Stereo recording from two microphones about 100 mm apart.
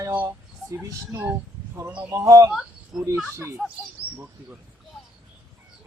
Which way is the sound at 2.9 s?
5° right (ahead or behind).